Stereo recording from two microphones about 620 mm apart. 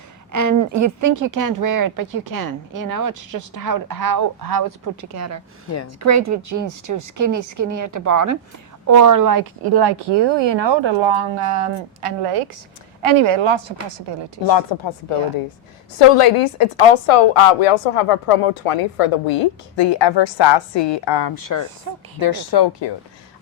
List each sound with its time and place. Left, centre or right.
0.3 s speech: right
14.4 s speech: left
16.0 s a woman's voice: left